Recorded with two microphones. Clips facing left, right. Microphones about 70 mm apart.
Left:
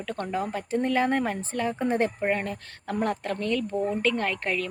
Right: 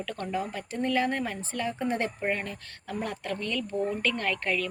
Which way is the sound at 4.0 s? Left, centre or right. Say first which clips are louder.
Left 3 dB; left.